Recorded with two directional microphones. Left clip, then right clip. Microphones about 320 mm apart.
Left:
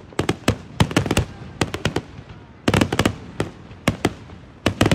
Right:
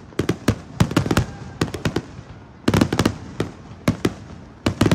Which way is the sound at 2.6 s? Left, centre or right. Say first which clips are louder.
Left 1 dB; centre.